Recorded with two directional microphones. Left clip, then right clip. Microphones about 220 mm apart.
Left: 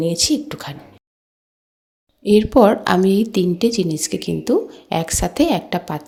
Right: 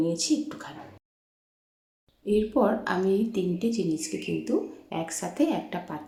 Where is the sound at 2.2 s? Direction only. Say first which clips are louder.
Left 12 dB; 45° left (ahead or behind).